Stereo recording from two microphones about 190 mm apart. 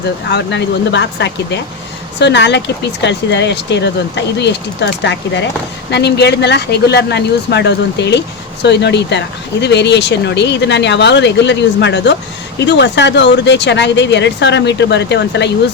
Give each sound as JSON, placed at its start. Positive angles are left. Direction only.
{"t": 0.3, "sound": "speech", "side_deg": 65}